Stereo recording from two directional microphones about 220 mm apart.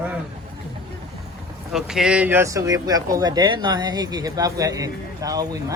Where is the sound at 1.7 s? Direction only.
Centre (ahead or behind).